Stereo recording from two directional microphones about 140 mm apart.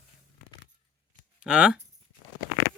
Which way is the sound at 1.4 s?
5° right (ahead or behind).